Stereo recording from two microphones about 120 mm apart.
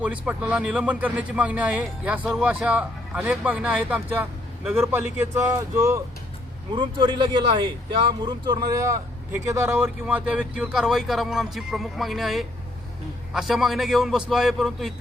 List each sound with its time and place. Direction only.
0.0 s a man's voice: 10° right (ahead or behind)
6.7 s speech: 40° right (ahead or behind)
8.9 s speech: 25° right (ahead or behind)
9.8 s speech: 10° right (ahead or behind)